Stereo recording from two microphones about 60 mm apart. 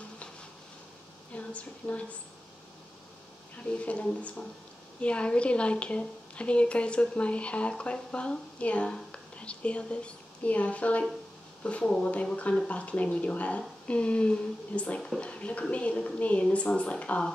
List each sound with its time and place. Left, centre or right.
1.3 s speech: left
3.7 s a woman's voice: left
15.0 s speech: centre
15.2 s a woman's voice: left